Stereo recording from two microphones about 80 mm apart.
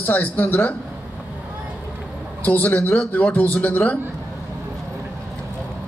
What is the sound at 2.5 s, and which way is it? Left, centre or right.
Speech, left.